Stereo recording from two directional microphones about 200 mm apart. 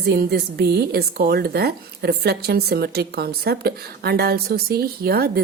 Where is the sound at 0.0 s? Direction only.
55° right (ahead or behind).